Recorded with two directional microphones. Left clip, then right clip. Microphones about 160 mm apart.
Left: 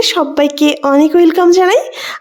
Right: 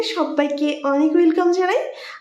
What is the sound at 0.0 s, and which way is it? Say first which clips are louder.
A woman's voice: left 8 dB; 65° left (ahead or behind).